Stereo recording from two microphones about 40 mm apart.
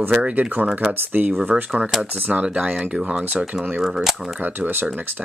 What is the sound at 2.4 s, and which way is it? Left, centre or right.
Speech, right.